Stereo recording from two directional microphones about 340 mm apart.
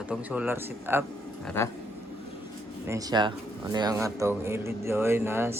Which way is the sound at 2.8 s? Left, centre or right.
Centre.